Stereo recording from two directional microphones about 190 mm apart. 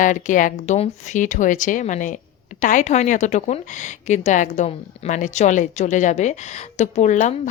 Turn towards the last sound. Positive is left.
turn(degrees=40)  # may be behind; listen again after turning